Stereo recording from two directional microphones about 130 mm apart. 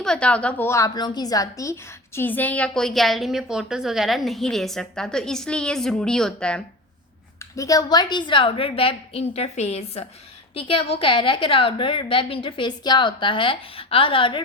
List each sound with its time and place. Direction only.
0.0 s a woman's voice: 5° left (ahead or behind)
0.9 s a woman's voice: 35° left (ahead or behind); by 6.6 s 5° left (ahead or behind)
7.3 s a woman's voice: 25° left (ahead or behind); by 14.4 s 40° left (ahead or behind)